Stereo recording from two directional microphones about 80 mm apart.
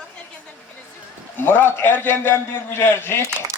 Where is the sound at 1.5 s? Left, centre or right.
Left.